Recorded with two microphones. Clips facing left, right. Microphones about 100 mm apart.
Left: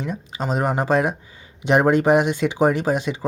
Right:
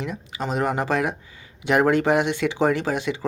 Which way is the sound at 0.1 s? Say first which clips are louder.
Left 2 dB; 25° left (ahead or behind).